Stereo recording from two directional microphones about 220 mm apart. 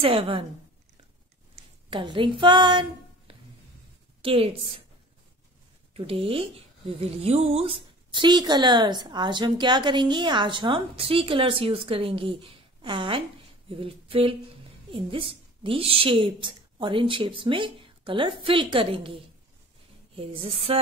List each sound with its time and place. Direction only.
0.0 s a woman's voice: 25° right (ahead or behind)
1.9 s a woman's voice: 25° right (ahead or behind)
5.9 s a woman's voice: 25° right (ahead or behind)
13.7 s a sound: 25° right (ahead or behind)
14.9 s a woman's voice: 25° right (ahead or behind)